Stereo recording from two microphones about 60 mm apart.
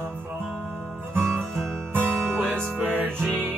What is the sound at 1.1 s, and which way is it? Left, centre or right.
Music, right.